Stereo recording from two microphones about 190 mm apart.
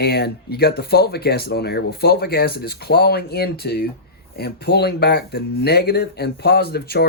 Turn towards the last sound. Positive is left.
turn(degrees=55)  # may be behind; listen again after turning